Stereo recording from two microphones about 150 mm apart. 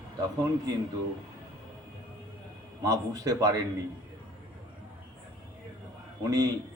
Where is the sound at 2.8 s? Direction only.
25° right (ahead or behind).